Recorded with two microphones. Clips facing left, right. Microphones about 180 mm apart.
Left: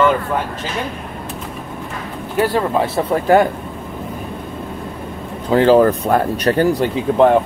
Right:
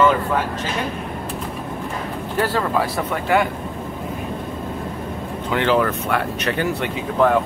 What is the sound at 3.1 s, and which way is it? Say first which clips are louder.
Speech: left 7 dB; 40° left (ahead or behind).